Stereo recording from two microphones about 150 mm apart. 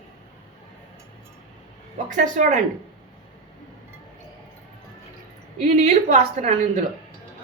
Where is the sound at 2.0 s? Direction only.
60° right (ahead or behind).